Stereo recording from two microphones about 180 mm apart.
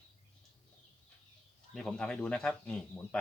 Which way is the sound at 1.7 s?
5° left (ahead or behind).